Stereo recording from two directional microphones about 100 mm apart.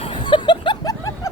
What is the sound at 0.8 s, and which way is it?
Snicker, 35° left (ahead or behind).